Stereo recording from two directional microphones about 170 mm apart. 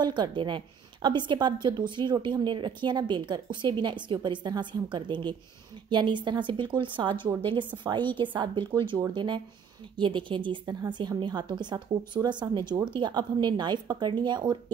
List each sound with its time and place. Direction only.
0.0 s a woman's voice: 25° right (ahead or behind)